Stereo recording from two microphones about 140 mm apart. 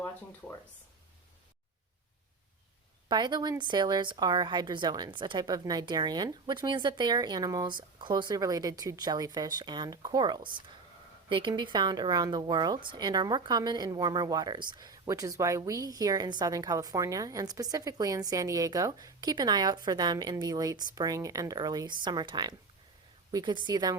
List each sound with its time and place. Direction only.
3.1 s a woman's voice: 30° right (ahead or behind)